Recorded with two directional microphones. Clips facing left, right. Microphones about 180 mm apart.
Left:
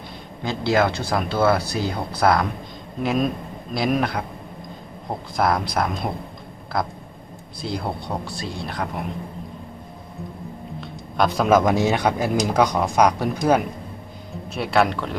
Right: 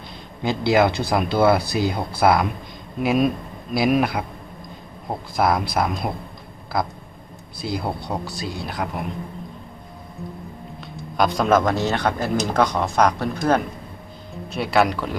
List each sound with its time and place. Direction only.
0.4 s speech: 15° right (ahead or behind)
7.6 s speech: 5° right (ahead or behind)
10.8 s speech: centre (ahead or behind)
14.5 s speech: centre (ahead or behind)